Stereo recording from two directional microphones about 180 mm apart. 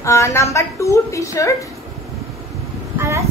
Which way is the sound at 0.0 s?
15° left (ahead or behind).